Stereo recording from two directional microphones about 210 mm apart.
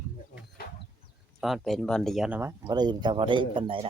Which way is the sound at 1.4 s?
Centre (ahead or behind).